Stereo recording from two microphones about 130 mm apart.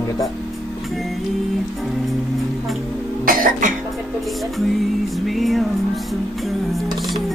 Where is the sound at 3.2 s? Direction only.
90° right.